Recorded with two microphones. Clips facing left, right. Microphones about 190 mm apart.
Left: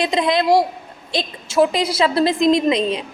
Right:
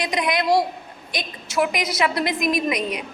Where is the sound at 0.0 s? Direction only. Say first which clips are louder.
Left 5 dB; 25° left (ahead or behind).